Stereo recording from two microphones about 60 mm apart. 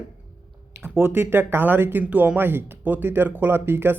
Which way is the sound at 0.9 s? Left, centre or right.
Right.